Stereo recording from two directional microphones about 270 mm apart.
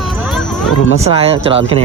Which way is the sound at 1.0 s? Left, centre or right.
Right.